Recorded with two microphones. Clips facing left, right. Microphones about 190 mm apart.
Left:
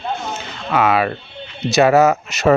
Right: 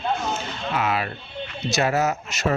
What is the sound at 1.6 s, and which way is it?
Speech, 70° left (ahead or behind).